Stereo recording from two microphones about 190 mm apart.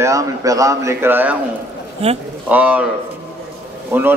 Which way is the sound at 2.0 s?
35° right (ahead or behind).